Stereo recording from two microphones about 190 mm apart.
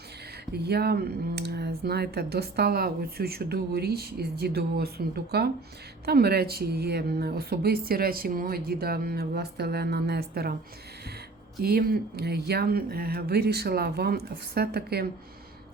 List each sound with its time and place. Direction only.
0.5 s speech: 55° right (ahead or behind)
11.6 s speech: 50° right (ahead or behind)